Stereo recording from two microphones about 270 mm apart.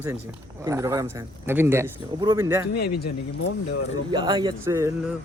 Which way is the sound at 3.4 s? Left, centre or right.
Left.